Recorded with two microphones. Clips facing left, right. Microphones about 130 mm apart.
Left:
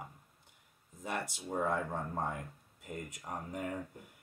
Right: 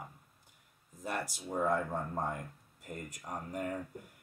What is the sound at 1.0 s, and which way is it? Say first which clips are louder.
Speech: right 1 dB; 25° left (ahead or behind).